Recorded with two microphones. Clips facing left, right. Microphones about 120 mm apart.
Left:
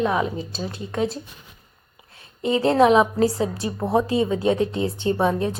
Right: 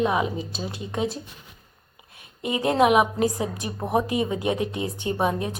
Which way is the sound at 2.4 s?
15° right (ahead or behind).